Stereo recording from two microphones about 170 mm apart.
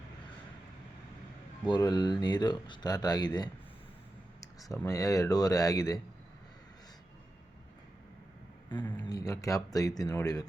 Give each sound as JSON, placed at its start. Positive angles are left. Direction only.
{"t": 1.6, "sound": "speech", "side_deg": 25}
{"t": 9.0, "sound": "speech", "side_deg": 20}